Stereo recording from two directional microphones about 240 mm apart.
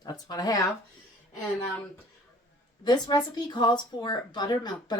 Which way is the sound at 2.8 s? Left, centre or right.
Centre.